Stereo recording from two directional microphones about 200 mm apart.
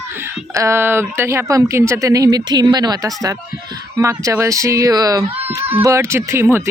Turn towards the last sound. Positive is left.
turn(degrees=-10)  # may be behind; listen again after turning